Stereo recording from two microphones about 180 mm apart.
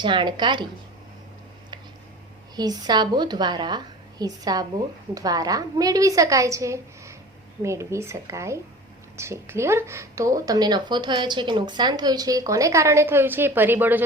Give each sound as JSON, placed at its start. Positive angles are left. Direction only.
{"t": 0.0, "sound": "a woman's voice", "side_deg": -25}
{"t": 2.6, "sound": "a woman's voice", "side_deg": -20}